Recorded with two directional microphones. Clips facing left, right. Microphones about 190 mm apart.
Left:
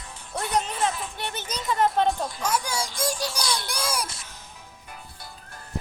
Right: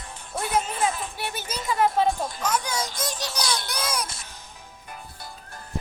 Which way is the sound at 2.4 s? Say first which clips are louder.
Even; 10° left (ahead or behind).